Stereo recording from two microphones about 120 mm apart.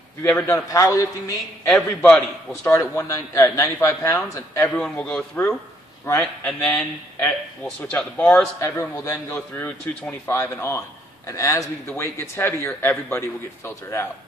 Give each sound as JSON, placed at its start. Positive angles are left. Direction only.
{"t": 0.5, "sound": "speech", "side_deg": 25}
{"t": 1.7, "sound": "a man's voice", "side_deg": 10}
{"t": 2.7, "sound": "speech", "side_deg": 30}
{"t": 4.7, "sound": "a man's voice", "side_deg": 10}
{"t": 6.1, "sound": "speech", "side_deg": 25}
{"t": 6.4, "sound": "a man's voice", "side_deg": 10}
{"t": 8.5, "sound": "speech", "side_deg": 25}